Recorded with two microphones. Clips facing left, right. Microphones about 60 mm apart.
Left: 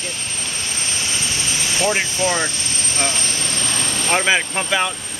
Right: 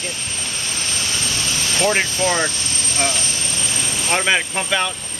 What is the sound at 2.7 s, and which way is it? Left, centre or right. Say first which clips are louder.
Vehicle: right 1 dB; left.